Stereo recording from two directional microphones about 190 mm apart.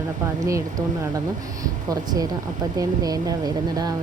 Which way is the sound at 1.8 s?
20° right (ahead or behind).